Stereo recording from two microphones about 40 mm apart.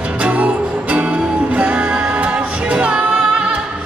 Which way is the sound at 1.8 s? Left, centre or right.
Right.